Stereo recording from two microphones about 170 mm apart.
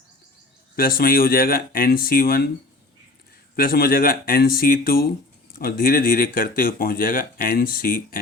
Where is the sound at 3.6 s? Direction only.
60° left (ahead or behind).